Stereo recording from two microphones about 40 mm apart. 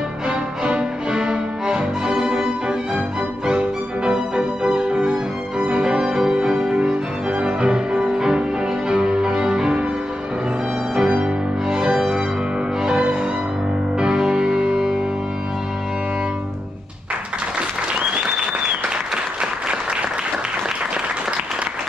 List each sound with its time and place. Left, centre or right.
0.7 s music: centre
3.4 s music: right
11.0 s music: right